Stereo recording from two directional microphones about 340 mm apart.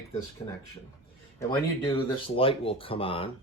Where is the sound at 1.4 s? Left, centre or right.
Centre.